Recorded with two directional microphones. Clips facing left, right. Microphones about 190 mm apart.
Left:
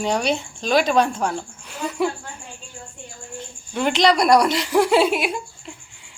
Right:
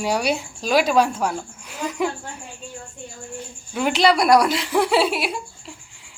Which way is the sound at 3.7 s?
5° right (ahead or behind).